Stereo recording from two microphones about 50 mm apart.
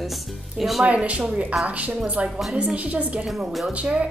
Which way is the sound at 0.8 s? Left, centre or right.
Right.